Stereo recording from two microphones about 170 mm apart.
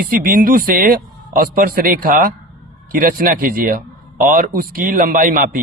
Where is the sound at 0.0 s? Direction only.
55° right (ahead or behind).